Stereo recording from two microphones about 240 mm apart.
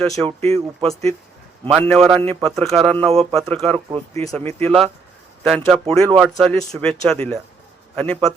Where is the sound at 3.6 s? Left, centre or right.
Right.